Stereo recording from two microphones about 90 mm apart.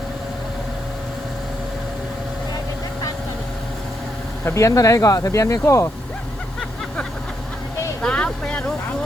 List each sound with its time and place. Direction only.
4.4 s speech: 35° left (ahead or behind)
8.0 s vehicle: 10° left (ahead or behind)